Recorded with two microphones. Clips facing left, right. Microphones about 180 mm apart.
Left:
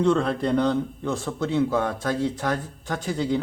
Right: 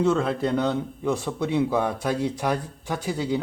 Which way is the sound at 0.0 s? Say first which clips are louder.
Left 1 dB; 5° right (ahead or behind).